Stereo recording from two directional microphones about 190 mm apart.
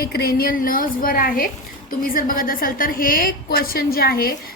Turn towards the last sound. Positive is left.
turn(degrees=50)  # may be behind; listen again after turning